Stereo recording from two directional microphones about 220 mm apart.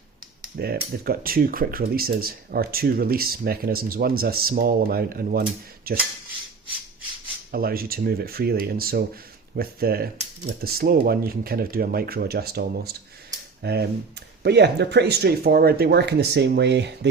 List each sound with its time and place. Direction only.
0.5 s speech: 45° right (ahead or behind)
7.5 s speech: 40° right (ahead or behind)